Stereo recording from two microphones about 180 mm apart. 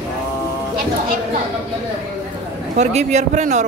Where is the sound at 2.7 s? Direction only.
40° right (ahead or behind).